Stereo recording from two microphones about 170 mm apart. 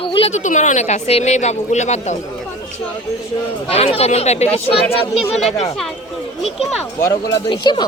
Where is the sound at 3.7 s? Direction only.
35° left (ahead or behind).